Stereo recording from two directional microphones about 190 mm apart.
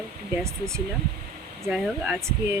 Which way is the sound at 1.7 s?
5° right (ahead or behind).